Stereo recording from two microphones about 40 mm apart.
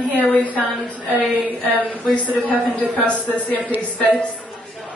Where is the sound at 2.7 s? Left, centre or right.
Left.